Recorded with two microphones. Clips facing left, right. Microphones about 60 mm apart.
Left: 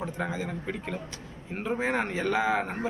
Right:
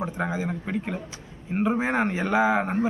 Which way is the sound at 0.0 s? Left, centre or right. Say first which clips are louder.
Right 4 dB; centre.